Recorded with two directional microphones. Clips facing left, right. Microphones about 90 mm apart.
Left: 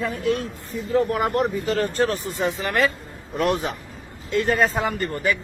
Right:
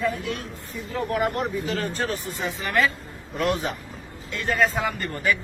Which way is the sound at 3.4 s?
40° left (ahead or behind).